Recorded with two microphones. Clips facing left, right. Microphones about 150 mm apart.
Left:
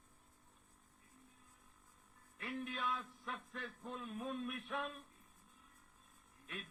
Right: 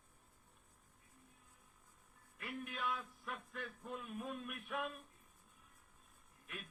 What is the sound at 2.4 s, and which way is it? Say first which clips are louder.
Speech: left 1 dB; 35° left (ahead or behind).